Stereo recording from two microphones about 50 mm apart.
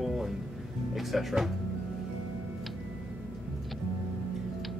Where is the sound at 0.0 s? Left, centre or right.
Centre.